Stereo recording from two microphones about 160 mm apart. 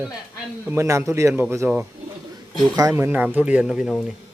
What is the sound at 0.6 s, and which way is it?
A woman's voice, 20° right (ahead or behind).